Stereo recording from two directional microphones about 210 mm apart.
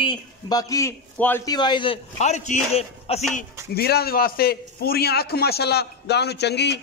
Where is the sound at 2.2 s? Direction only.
35° left (ahead or behind).